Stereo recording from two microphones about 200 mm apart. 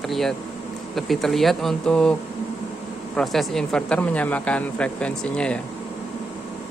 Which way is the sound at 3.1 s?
Centre (ahead or behind).